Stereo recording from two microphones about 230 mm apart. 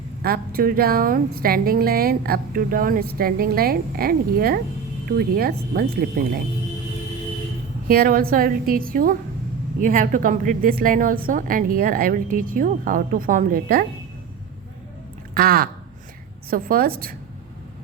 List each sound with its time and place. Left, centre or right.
0.2 s a woman's voice: right
7.9 s a woman's voice: right
15.4 s a woman's voice: right